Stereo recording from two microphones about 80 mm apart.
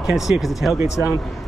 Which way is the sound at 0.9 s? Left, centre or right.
Left.